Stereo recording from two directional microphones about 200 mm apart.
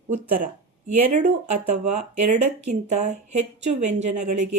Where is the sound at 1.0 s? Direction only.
40° right (ahead or behind).